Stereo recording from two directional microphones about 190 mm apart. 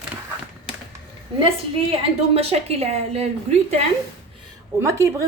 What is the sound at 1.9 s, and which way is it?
A woman's voice, 30° right (ahead or behind).